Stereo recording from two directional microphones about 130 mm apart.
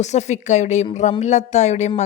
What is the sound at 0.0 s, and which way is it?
A woman's voice, 60° left (ahead or behind).